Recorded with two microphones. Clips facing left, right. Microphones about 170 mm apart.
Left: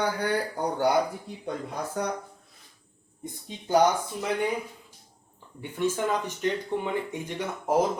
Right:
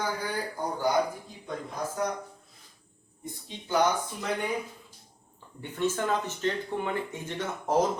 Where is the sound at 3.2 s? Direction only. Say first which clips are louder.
Left 2 dB; 40° left (ahead or behind).